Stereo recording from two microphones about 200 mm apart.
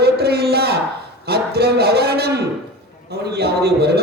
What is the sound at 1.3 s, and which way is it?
Speech, 55° right (ahead or behind).